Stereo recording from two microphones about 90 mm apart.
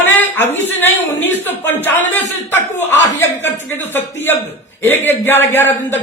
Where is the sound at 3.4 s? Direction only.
25° left (ahead or behind).